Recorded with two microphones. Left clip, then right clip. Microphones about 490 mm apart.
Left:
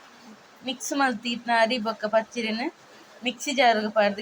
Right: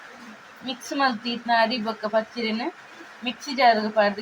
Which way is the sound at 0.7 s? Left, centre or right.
Left.